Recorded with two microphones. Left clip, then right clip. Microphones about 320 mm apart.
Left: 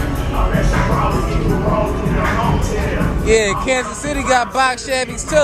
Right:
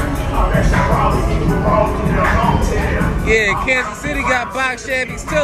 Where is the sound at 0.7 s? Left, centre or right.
Right.